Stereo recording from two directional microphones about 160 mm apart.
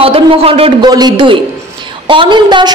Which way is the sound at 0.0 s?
35° right (ahead or behind).